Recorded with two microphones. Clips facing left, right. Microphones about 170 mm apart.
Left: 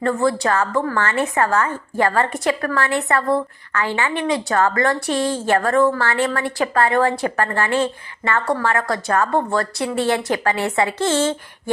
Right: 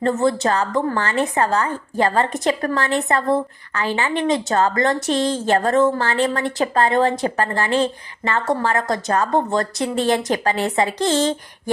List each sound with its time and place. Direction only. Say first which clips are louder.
0.0 s a woman's voice: right 1 dB; 20° right (ahead or behind)